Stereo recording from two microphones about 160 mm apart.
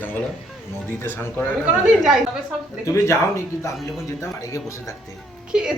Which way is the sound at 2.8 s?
15° left (ahead or behind).